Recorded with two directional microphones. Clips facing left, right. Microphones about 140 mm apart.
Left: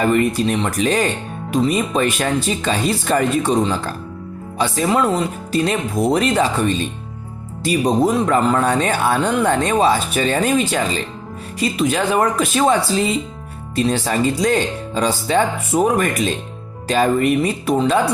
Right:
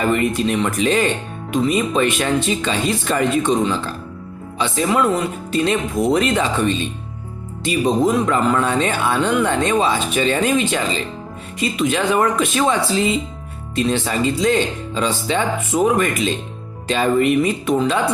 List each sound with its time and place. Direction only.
0.0 s speech: 40° left (ahead or behind)